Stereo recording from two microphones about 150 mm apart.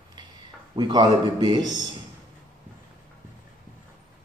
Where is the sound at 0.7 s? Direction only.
30° right (ahead or behind).